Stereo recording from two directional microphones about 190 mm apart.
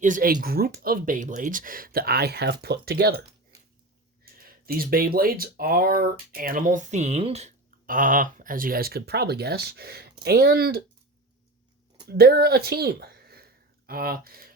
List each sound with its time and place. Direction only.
0.0 s speech: 45° right (ahead or behind)
4.4 s speech: 50° right (ahead or behind)
12.0 s speech: 55° right (ahead or behind)